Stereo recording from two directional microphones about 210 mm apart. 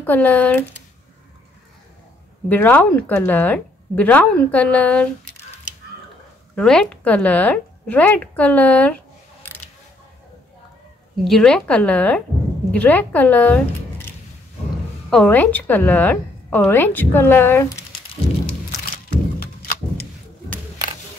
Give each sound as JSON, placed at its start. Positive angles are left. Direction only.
{"t": 0.0, "sound": "a woman's voice", "side_deg": 10}
{"t": 2.5, "sound": "a woman's voice", "side_deg": 10}
{"t": 6.5, "sound": "a woman's voice", "side_deg": 5}
{"t": 11.2, "sound": "a woman's voice", "side_deg": 5}
{"t": 15.0, "sound": "a woman's voice", "side_deg": 5}
{"t": 19.4, "sound": "a sound", "side_deg": 45}